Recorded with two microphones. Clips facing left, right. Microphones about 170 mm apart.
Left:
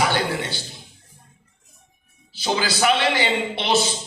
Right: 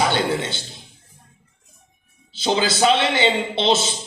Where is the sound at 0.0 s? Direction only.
20° right (ahead or behind).